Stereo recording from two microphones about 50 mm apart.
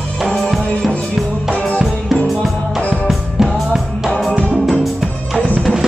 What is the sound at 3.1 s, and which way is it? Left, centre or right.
Music, centre.